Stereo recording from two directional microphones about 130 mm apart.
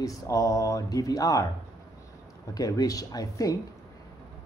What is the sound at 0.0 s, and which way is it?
Speech, 25° left (ahead or behind).